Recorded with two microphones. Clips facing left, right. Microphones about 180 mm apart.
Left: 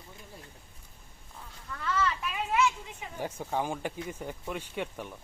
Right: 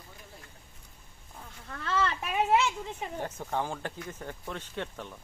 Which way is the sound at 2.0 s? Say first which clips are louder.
Right 4 dB; 60° right (ahead or behind).